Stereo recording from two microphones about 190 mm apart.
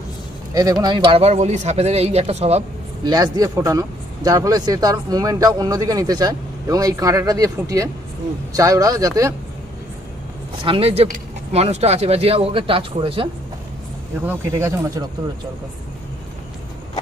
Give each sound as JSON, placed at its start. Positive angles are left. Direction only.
{"t": 0.6, "sound": "speech", "side_deg": -20}
{"t": 10.6, "sound": "speech", "side_deg": -30}
{"t": 14.2, "sound": "speech", "side_deg": -15}